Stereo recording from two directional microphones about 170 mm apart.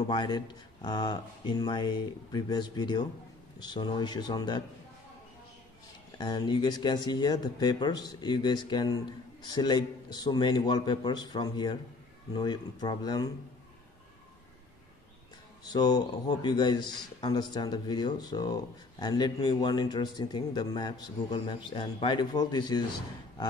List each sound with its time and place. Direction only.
0.0 s a man's voice: 25° left (ahead or behind)
6.1 s a man's voice: 25° left (ahead or behind)
15.7 s a man's voice: 25° left (ahead or behind)